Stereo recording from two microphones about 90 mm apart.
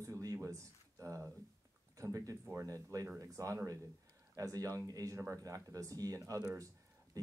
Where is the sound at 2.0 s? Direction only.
40° right (ahead or behind).